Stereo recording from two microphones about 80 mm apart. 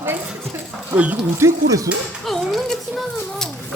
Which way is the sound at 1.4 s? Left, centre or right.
Right.